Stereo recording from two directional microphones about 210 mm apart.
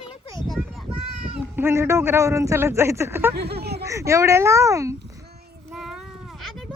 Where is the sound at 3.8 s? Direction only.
15° right (ahead or behind).